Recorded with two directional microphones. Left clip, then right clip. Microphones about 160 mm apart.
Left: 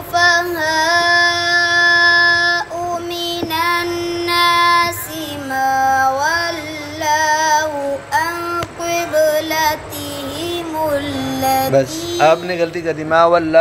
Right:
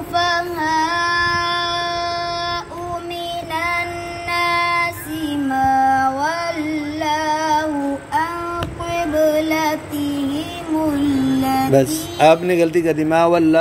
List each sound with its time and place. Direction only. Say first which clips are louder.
0.1 s child singing: left 5 dB; 35° left (ahead or behind)
5.5 s female singing: left 1 dB; 35° left (ahead or behind)
8.9 s music: left 2 dB; 35° left (ahead or behind)
11.3 s music: left 3 dB; 35° left (ahead or behind)
11.7 s a man's voice: left 1 dB; 40° right (ahead or behind)